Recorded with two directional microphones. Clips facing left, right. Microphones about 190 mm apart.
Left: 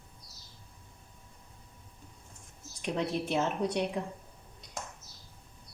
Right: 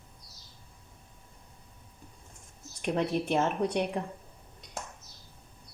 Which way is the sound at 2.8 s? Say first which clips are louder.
Right 3 dB; 55° right (ahead or behind).